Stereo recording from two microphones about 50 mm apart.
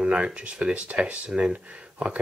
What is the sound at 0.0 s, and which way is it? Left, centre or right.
Speech, right.